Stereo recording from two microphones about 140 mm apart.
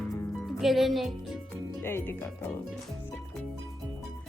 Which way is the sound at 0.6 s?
Centre (ahead or behind).